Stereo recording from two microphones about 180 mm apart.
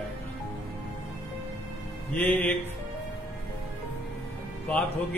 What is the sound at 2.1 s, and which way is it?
Speech, 10° left (ahead or behind).